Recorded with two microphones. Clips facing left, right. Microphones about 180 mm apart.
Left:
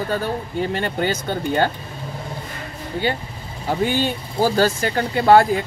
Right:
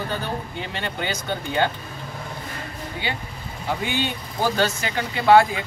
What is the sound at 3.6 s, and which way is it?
Speech, 40° left (ahead or behind).